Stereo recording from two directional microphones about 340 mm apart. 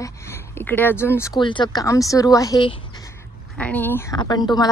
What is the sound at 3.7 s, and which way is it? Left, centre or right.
Speech, centre.